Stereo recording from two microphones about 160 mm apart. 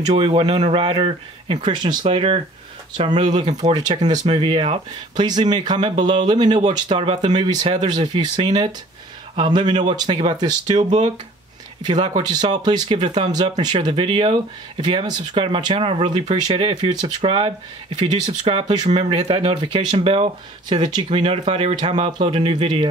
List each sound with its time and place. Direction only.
0.1 s speech: 35° right (ahead or behind)